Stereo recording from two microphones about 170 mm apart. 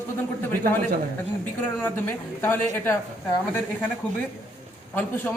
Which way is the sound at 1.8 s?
15° left (ahead or behind).